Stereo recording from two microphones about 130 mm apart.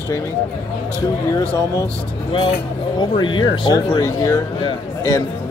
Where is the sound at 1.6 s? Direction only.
25° left (ahead or behind).